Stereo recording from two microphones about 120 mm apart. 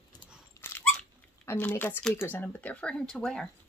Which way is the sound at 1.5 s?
15° left (ahead or behind).